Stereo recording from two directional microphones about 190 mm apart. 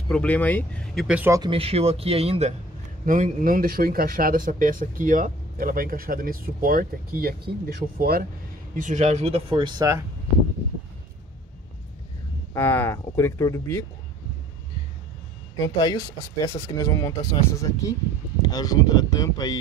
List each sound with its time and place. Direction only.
0.1 s speech: 5° left (ahead or behind)
1.0 s speech: 10° right (ahead or behind)
1.4 s speech: 30° right (ahead or behind)
3.1 s speech: 45° right (ahead or behind)
8.7 s speech: 40° right (ahead or behind); by 10.0 s 20° right (ahead or behind)
12.5 s speech: 10° left (ahead or behind)
15.5 s speech: 20° left (ahead or behind)